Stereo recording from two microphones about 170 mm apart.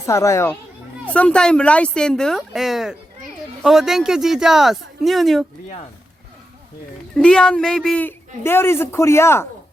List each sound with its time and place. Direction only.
0.0 s speech: 15° left (ahead or behind); by 5.5 s centre (ahead or behind)
7.2 s speech: 5° left (ahead or behind)